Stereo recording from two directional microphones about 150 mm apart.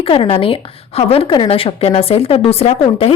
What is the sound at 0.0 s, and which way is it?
A woman's voice, 40° left (ahead or behind).